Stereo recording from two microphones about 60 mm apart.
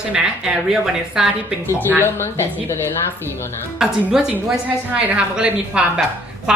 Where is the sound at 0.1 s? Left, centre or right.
Centre.